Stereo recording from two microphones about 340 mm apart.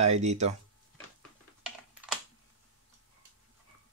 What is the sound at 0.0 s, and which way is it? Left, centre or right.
Speech, centre.